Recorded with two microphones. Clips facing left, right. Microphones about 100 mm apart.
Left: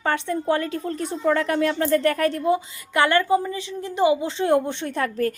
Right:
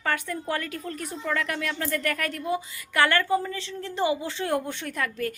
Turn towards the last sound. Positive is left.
turn(degrees=25)  # may be behind; listen again after turning